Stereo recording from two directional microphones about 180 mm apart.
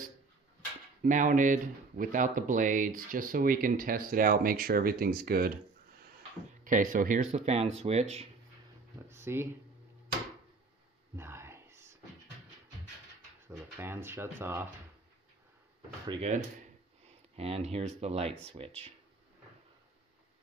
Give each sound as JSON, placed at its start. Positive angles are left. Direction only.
{"t": 1.0, "sound": "speech", "side_deg": -45}
{"t": 6.6, "sound": "speech", "side_deg": -50}
{"t": 7.2, "sound": "speech", "side_deg": -40}
{"t": 8.9, "sound": "a sound", "side_deg": -15}
{"t": 11.1, "sound": "whispering", "side_deg": -15}
{"t": 13.5, "sound": "speech", "side_deg": -15}
{"t": 17.4, "sound": "speech", "side_deg": -35}